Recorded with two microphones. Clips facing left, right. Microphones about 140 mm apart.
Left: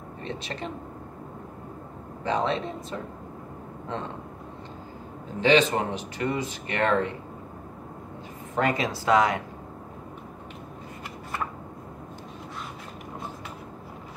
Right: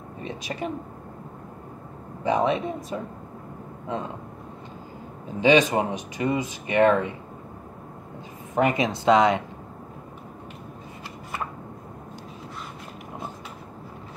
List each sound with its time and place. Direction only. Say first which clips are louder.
0.2 s speech: right 3 dB; 10° right (ahead or behind)
2.2 s speech: right 4 dB; 15° right (ahead or behind)
5.4 s speech: right 2 dB; 15° right (ahead or behind)
8.5 s speech: right 3 dB; 20° right (ahead or behind)